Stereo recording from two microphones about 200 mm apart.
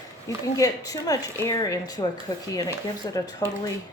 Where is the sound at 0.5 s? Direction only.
15° left (ahead or behind).